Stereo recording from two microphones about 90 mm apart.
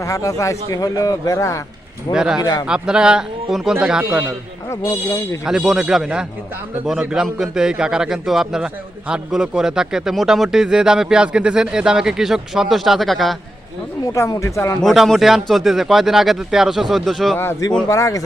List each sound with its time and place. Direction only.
0.0 s a man's voice: 40° left (ahead or behind)
2.1 s a man's voice: 5° right (ahead or behind)
2.4 s speech: 50° left (ahead or behind)
2.6 s a man's voice: 10° right (ahead or behind)
4.7 s a man's voice: 35° left (ahead or behind)
5.5 s a man's voice: 5° right (ahead or behind)
14.1 s a man's voice: 40° left (ahead or behind)
14.8 s speech: centre (ahead or behind)
17.8 s a man's voice: 35° left (ahead or behind)